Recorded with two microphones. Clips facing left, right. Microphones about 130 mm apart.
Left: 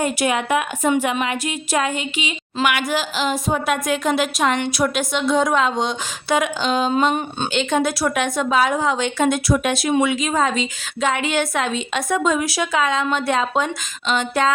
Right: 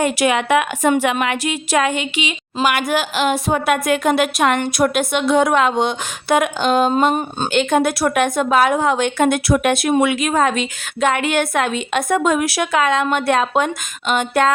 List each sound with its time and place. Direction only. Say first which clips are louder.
0.0 s a woman's voice: right 3 dB; 80° right
1.1 s a sound: right 3 dB; 70° right (ahead or behind)
2.6 s a woman's voice: right 3 dB; 55° right (ahead or behind)